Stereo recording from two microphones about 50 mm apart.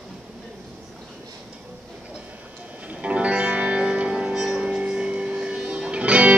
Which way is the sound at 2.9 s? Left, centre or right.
Right.